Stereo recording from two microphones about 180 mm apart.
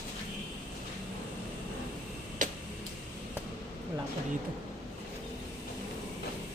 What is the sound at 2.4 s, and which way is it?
Tick-tock, 45° right (ahead or behind).